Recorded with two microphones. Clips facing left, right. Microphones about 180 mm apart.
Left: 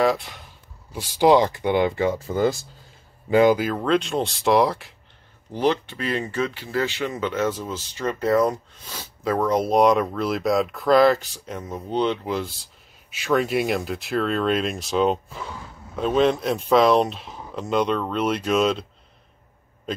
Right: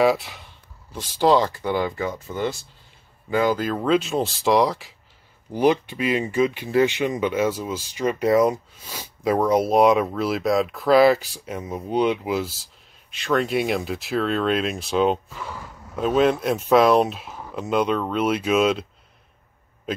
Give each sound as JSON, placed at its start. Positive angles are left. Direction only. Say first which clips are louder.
{"t": 0.0, "sound": "speech", "louder": "right 2 dB", "side_deg": -5}
{"t": 0.9, "sound": "speech", "louder": "left 2 dB", "side_deg": 15}
{"t": 3.3, "sound": "speech", "louder": "left 5 dB", "side_deg": 25}
{"t": 3.5, "sound": "speech", "louder": "right 1 dB", "side_deg": 0}
{"t": 5.5, "sound": "speech", "louder": "right 3 dB", "side_deg": -10}